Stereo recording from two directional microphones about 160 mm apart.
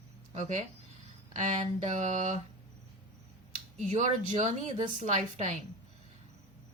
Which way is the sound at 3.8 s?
45° right (ahead or behind).